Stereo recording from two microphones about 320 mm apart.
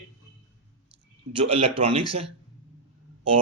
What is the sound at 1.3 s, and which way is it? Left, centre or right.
Speech, centre.